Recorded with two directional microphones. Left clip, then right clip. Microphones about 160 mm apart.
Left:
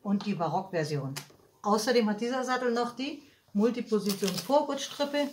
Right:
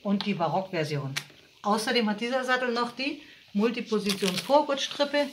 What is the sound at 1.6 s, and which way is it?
Speech, 15° right (ahead or behind).